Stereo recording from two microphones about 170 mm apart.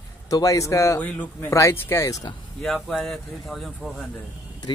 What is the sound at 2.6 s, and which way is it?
Speech, centre (ahead or behind).